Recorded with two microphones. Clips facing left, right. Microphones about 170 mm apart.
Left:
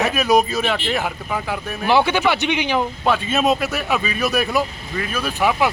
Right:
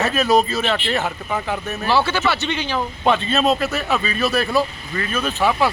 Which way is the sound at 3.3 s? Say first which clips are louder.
Even; 15° left (ahead or behind).